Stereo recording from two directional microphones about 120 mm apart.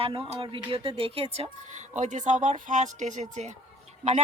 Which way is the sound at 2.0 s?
90° right.